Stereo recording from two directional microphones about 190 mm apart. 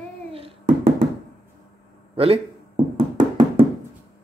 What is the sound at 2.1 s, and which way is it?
Knock, 30° right (ahead or behind).